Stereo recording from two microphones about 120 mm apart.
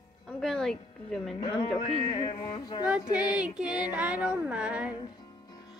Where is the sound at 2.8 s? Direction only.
10° right (ahead or behind).